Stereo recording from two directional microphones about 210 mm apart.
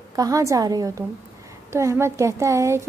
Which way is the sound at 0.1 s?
15° right (ahead or behind).